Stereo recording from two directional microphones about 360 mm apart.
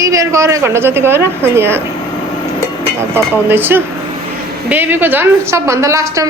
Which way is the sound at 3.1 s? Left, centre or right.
Centre.